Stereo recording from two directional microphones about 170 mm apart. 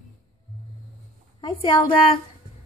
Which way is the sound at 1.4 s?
25° left (ahead or behind).